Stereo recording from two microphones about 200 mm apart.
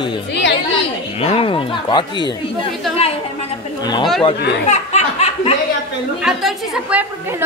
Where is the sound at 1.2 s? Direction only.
30° left (ahead or behind).